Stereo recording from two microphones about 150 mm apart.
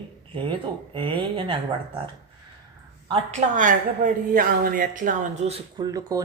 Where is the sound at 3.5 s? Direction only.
60° right (ahead or behind); by 5.6 s 45° right (ahead or behind).